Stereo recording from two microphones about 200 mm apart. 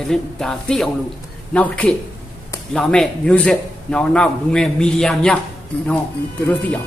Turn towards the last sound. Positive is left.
turn(degrees=10)  # may be behind; listen again after turning